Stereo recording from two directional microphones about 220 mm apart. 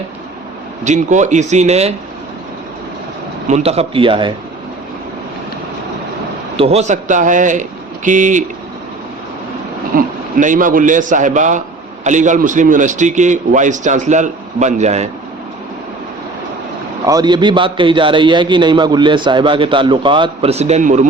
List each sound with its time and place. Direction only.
0.9 s a man's voice: 35° right (ahead or behind)
3.4 s a man's voice: 30° right (ahead or behind)
6.6 s a man's voice: 30° right (ahead or behind)
9.9 s a man's voice: 35° right (ahead or behind)
17.1 s a man's voice: 20° right (ahead or behind)